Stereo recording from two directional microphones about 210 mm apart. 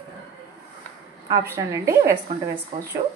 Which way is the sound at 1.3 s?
15° right (ahead or behind).